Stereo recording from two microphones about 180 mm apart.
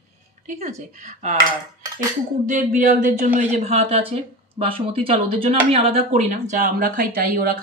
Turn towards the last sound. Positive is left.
turn(degrees=-55)  # may be behind; listen again after turning